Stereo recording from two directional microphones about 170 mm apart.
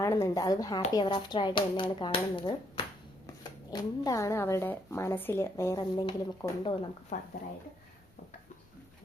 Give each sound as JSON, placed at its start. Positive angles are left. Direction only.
{"t": 0.0, "sound": "speech", "side_deg": 20}
{"t": 7.1, "sound": "speech", "side_deg": 50}